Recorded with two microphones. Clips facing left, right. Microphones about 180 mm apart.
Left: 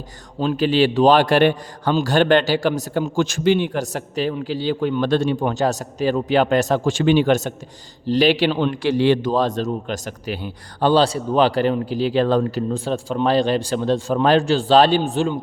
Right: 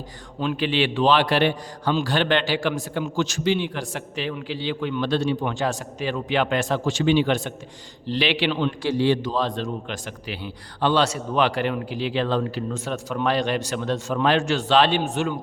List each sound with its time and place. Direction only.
0.3 s a man's voice: 35° left (ahead or behind); by 9.3 s 65° left (ahead or behind)
9.3 s a man's voice: 45° left (ahead or behind)